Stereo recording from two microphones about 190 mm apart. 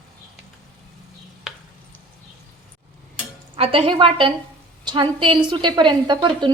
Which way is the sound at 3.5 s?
30° right (ahead or behind).